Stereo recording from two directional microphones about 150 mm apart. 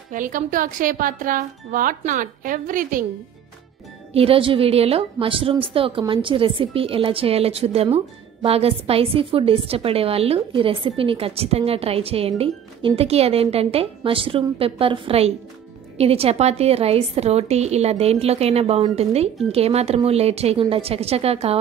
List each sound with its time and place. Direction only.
0.1 s speech: 60° right (ahead or behind)
4.1 s a woman's voice: 40° right (ahead or behind)